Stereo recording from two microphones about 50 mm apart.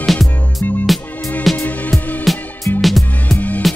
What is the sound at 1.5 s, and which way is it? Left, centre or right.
Music, left.